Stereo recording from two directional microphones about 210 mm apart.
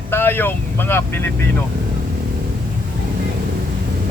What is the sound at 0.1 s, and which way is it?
Speech, 10° left (ahead or behind).